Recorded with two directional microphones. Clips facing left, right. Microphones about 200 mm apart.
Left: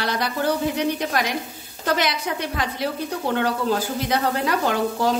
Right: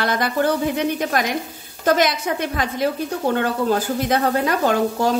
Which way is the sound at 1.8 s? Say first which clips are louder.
Right 5 dB; 45° right (ahead or behind).